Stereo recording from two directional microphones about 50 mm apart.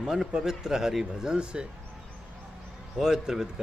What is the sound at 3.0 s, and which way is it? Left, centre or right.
Speech, centre.